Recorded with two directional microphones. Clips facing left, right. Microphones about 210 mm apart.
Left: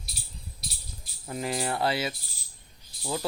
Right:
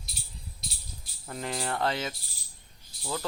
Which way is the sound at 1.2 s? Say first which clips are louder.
Left 3 dB; 10° left (ahead or behind).